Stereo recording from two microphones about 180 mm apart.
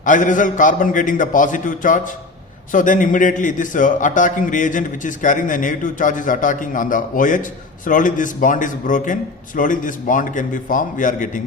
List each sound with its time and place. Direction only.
0.0 s a man's voice: 45° left (ahead or behind)